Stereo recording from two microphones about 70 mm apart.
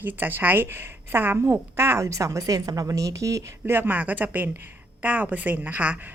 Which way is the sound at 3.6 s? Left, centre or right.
Right.